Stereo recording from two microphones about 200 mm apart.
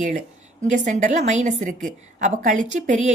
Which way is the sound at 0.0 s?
40° right (ahead or behind).